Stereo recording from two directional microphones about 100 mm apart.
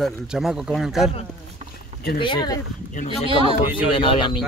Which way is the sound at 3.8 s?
60° left (ahead or behind).